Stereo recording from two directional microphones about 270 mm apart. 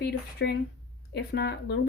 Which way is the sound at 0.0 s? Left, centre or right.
Left.